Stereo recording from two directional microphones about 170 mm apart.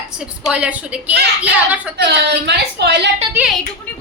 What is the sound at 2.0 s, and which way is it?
A woman's voice, 80° right.